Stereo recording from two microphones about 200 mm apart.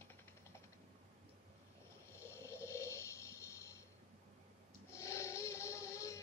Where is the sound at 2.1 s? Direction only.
15° left (ahead or behind).